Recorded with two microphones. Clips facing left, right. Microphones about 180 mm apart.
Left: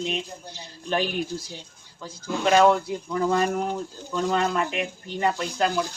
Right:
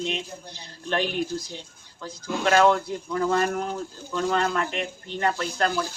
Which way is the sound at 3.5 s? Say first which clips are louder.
Left 2 dB; centre (ahead or behind).